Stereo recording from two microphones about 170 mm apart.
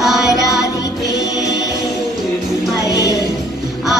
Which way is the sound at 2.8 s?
20° left (ahead or behind).